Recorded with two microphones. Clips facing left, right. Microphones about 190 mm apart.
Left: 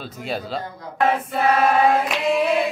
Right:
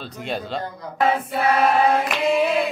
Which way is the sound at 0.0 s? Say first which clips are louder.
Even; 5° left (ahead or behind).